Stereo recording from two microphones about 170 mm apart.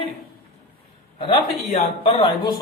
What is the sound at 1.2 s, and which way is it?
A man's voice, 30° left (ahead or behind).